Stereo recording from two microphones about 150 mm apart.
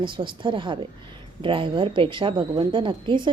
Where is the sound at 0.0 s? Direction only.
35° right (ahead or behind).